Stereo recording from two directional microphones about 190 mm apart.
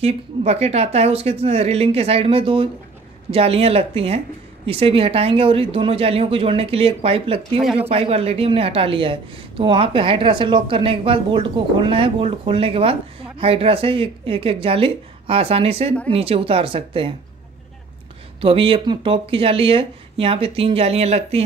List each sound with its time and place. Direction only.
0.0 s a woman's voice: 35° right (ahead or behind)
7.6 s speech: 5° right (ahead or behind)
7.9 s a woman's voice: 30° right (ahead or behind)
18.4 s a woman's voice: 30° right (ahead or behind)